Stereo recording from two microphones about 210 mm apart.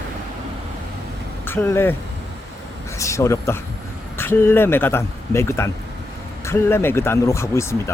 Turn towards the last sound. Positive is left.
turn(degrees=15)  # may be behind; listen again after turning